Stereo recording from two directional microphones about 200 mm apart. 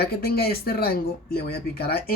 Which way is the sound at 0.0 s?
50° left (ahead or behind).